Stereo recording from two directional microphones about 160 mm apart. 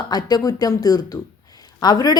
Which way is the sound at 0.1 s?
25° left (ahead or behind).